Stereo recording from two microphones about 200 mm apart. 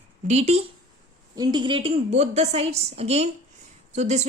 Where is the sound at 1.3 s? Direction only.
20° right (ahead or behind).